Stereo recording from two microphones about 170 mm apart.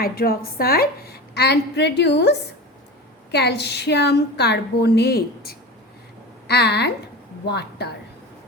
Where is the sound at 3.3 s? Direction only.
80° left.